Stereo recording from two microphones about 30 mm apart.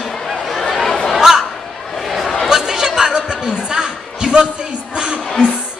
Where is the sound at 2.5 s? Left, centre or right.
Centre.